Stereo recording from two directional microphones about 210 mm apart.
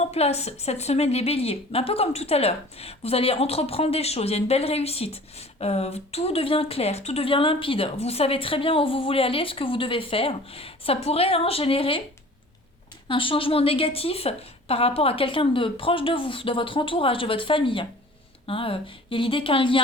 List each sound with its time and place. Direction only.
0.0 s a woman's voice: 30° left (ahead or behind)
13.1 s a woman's voice: 25° left (ahead or behind)